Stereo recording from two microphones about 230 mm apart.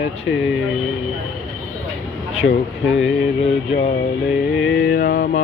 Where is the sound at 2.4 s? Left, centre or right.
Left.